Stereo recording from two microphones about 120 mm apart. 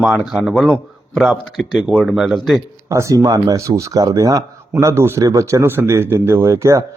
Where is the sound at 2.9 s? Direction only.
25° right (ahead or behind).